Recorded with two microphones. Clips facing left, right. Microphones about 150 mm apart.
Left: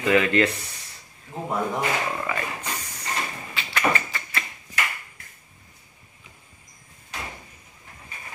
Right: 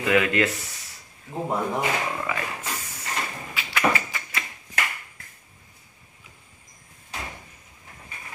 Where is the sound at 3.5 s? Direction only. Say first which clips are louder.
Right 1 dB; 10° right (ahead or behind).